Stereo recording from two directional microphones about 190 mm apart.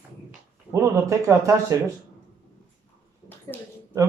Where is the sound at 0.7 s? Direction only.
15° right (ahead or behind).